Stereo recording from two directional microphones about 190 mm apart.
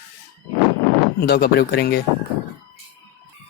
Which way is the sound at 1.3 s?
55° left (ahead or behind).